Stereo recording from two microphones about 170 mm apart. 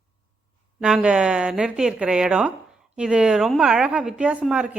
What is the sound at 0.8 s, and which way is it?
A woman's voice, 5° right (ahead or behind).